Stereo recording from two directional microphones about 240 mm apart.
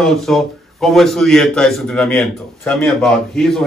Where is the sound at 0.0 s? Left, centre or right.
Centre.